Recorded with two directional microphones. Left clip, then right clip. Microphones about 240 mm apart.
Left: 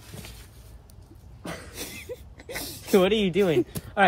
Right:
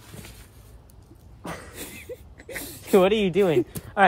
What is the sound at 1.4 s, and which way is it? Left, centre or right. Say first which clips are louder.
Cough: right 1 dB; right.